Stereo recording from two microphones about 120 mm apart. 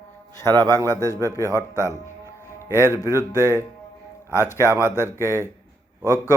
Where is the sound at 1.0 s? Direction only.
25° right (ahead or behind).